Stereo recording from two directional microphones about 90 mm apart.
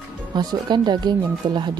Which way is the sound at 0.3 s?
55° right (ahead or behind).